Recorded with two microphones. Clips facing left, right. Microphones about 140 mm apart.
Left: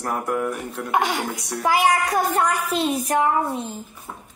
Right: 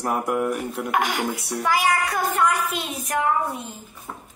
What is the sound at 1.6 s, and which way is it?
A woman's voice, 35° left (ahead or behind).